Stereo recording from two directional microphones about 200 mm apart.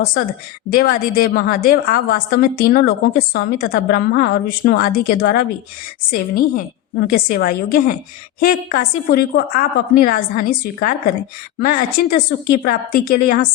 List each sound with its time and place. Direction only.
0.7 s a woman's voice: 45° left (ahead or behind)